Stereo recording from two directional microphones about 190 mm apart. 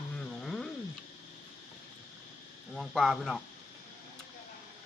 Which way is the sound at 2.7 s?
Centre (ahead or behind).